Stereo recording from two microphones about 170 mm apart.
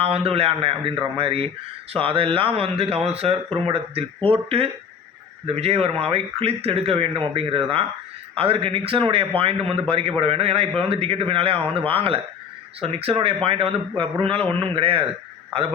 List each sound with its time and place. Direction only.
0.0 s speech: 35° right (ahead or behind)